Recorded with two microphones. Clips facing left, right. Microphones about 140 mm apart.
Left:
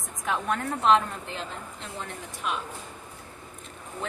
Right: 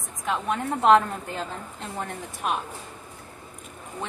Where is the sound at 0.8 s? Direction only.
45° right (ahead or behind).